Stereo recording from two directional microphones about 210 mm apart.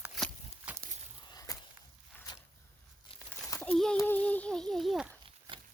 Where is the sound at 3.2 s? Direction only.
10° left (ahead or behind).